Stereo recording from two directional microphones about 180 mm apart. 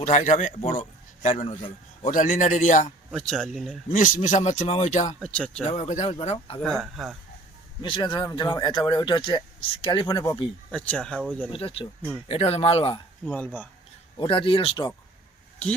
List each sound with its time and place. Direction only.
0.0 s a man's voice: 40° left (ahead or behind)
3.1 s speech: centre (ahead or behind)
3.9 s speech: 45° left (ahead or behind)
5.2 s speech: 5° left (ahead or behind)
5.6 s a man's voice: 40° left (ahead or behind)
6.6 s speech: centre (ahead or behind)
7.8 s speech: 25° left (ahead or behind)
10.7 s speech: 5° left (ahead or behind)
11.5 s a man's voice: 30° left (ahead or behind)
13.2 s speech: 5° left (ahead or behind)
14.2 s speech: 30° left (ahead or behind)